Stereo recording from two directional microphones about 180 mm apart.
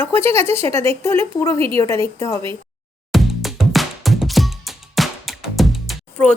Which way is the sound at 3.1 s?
Centre (ahead or behind).